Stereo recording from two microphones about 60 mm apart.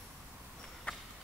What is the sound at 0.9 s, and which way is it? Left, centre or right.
Clip-clop, left.